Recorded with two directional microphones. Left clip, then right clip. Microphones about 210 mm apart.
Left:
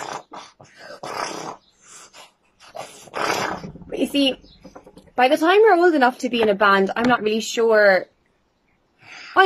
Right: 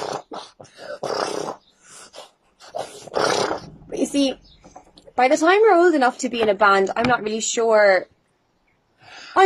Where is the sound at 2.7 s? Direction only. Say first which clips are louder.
Right 4 dB; 35° right (ahead or behind).